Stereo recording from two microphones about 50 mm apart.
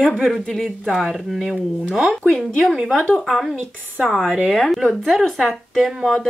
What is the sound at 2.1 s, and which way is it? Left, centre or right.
Speech, centre.